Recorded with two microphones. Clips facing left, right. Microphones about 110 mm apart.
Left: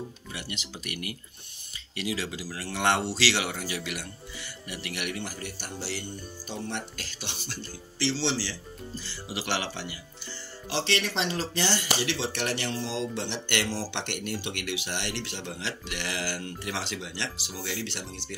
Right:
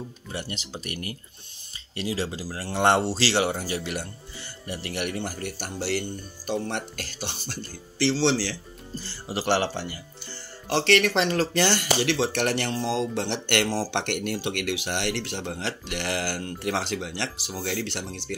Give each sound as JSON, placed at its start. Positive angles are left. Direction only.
{"t": 0.3, "sound": "speech", "side_deg": -35}
{"t": 8.0, "sound": "speech", "side_deg": -55}
{"t": 10.7, "sound": "speech", "side_deg": -60}